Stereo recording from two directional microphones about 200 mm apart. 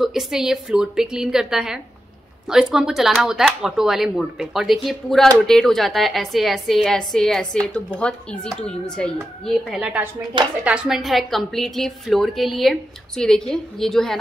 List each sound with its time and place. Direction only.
0.0 s a woman's voice: centre (ahead or behind)